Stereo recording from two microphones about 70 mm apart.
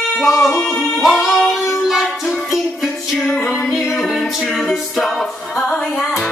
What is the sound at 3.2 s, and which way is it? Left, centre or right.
Music, centre.